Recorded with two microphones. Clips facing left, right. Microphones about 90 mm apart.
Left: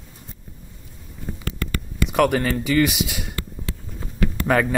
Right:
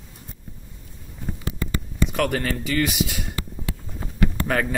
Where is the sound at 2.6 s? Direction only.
15° left (ahead or behind).